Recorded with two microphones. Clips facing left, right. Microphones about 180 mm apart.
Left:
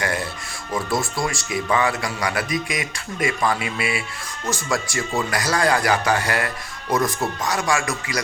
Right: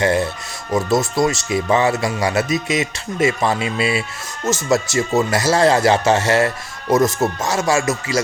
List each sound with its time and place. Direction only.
0.0 s a man's voice: 25° right (ahead or behind)